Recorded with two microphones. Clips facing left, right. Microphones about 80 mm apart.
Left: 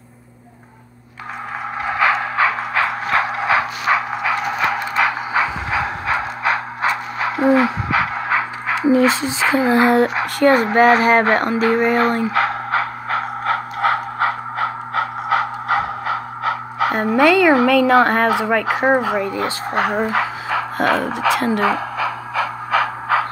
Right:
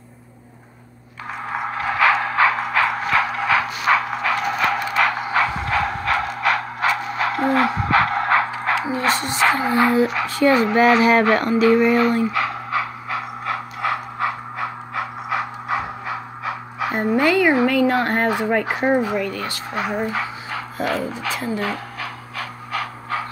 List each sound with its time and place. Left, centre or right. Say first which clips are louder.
1.8 s a sound: even; centre
9.8 s speech: left 3 dB; left
10.2 s a sound: left 2 dB; left
19.2 s speech: left 5 dB; left
19.7 s speech: left 5 dB; left
20.0 s speech: left 5 dB; left